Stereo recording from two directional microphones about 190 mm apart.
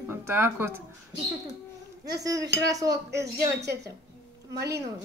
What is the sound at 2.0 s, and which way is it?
Speech, 20° right (ahead or behind).